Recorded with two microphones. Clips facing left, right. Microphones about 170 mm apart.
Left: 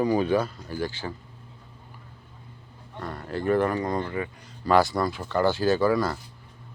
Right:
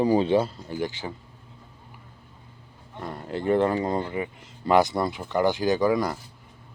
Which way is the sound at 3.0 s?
20° right (ahead or behind).